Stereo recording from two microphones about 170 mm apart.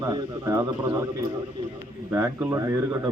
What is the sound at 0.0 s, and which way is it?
A man's voice, 20° right (ahead or behind).